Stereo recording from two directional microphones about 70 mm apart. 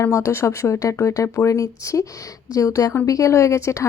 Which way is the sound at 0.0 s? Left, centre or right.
Left.